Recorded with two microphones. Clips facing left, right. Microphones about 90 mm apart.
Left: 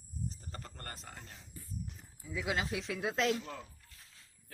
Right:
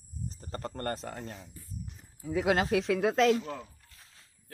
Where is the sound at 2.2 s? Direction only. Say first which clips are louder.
Right 9 dB; 55° right (ahead or behind).